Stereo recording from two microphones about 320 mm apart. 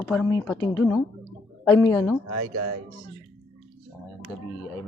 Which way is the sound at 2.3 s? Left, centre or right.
Right.